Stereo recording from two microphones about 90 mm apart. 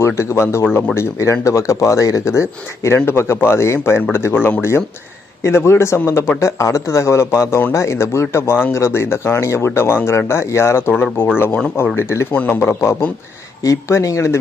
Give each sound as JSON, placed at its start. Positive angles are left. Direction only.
{"t": 0.0, "sound": "speech", "side_deg": 30}
{"t": 0.9, "sound": "speech", "side_deg": 35}